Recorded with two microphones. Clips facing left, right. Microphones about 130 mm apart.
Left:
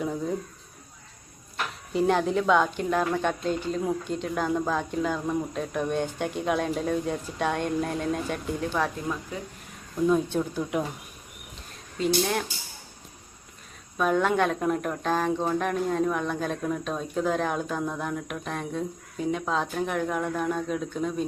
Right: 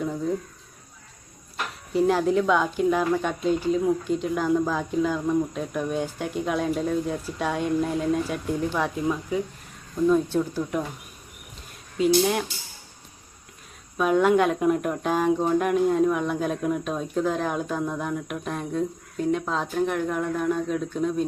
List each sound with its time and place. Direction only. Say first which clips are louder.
1.9 s speech: right 3 dB; centre (ahead or behind)
10.2 s speech: right 2 dB; centre (ahead or behind)
11.9 s speech: right 4 dB; 5° right (ahead or behind)
13.9 s speech: right 4 dB; 5° right (ahead or behind)